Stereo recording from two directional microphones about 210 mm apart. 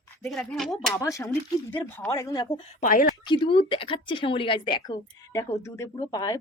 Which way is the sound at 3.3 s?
25° left (ahead or behind).